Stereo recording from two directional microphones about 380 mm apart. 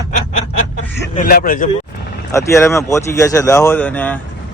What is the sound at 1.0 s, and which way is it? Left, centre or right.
Speech, left.